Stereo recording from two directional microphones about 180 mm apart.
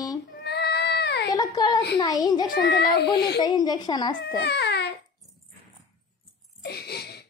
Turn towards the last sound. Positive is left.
turn(degrees=65)  # may be behind; listen again after turning